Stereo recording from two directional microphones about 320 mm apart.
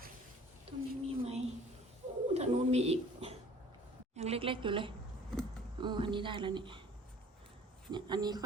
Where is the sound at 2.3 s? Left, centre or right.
Centre.